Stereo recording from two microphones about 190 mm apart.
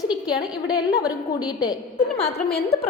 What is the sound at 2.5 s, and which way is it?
Speech, 55° left (ahead or behind).